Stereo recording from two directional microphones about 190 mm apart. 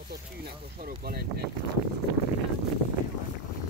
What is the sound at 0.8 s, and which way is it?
Boat, 50° right (ahead or behind).